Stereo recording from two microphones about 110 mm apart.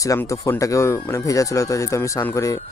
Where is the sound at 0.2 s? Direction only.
30° left (ahead or behind).